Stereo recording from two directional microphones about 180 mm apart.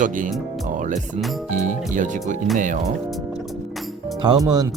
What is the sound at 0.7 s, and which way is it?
Music, 45° right (ahead or behind).